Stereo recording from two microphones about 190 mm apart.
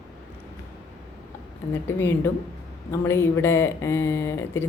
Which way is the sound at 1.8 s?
10° left (ahead or behind).